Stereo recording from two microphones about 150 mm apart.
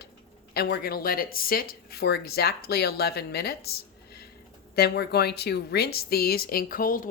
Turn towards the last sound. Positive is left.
turn(degrees=65)  # may be behind; listen again after turning